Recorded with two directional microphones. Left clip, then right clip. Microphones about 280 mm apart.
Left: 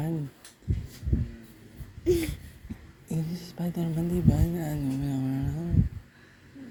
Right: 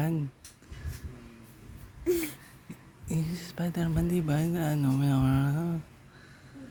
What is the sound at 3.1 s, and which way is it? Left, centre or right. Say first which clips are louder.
Speech: even; right.